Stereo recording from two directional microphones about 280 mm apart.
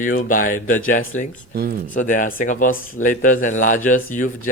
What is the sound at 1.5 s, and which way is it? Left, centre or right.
Speech, right.